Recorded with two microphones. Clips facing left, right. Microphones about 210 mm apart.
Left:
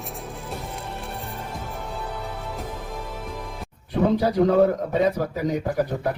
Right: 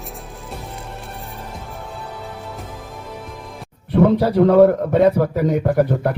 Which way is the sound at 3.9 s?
60° right (ahead or behind).